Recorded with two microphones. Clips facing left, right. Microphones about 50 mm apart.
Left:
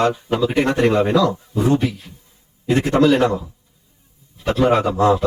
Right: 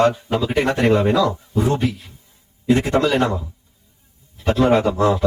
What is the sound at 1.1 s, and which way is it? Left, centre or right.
Speech, right.